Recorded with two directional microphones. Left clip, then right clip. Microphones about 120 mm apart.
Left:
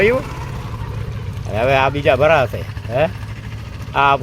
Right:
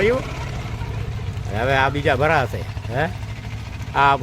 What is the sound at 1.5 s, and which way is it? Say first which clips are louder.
Speech: left 4 dB; 5° left (ahead or behind).